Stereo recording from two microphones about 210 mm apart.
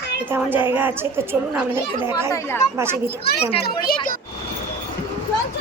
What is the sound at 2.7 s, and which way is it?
Speech, 10° right (ahead or behind).